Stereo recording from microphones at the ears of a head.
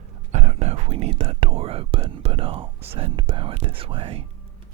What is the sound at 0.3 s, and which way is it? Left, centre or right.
Speech, right.